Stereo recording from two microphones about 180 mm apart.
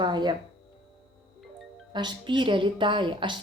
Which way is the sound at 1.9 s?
25° right (ahead or behind).